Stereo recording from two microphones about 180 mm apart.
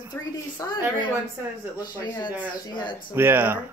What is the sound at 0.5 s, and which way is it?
Speech, 25° left (ahead or behind).